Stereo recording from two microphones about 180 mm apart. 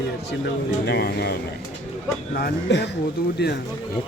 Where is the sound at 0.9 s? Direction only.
65° left (ahead or behind).